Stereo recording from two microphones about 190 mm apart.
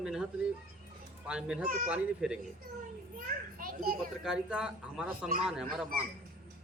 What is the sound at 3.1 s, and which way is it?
Speech, 50° right (ahead or behind).